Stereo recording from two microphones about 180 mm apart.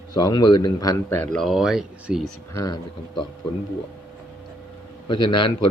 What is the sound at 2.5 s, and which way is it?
Speech, 20° left (ahead or behind).